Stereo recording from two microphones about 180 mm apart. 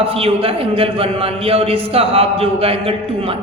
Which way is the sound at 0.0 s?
30° right (ahead or behind).